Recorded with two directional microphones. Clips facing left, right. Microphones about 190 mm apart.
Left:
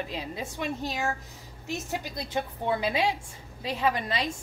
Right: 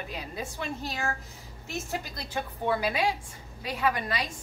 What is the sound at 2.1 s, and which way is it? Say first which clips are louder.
A woman's voice: left 3 dB; 20° left (ahead or behind).